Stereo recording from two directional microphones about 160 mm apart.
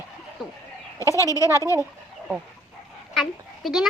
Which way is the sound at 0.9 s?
20° left (ahead or behind).